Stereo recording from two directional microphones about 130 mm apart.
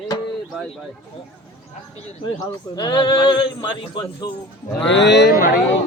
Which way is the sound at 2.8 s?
35° left (ahead or behind).